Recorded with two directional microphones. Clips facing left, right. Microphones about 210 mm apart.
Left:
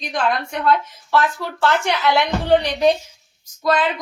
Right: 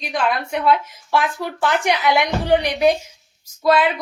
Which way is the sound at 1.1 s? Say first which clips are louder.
Left 1 dB; 15° right (ahead or behind).